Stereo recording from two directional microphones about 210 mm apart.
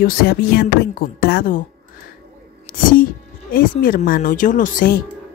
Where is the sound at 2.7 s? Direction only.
40° left (ahead or behind).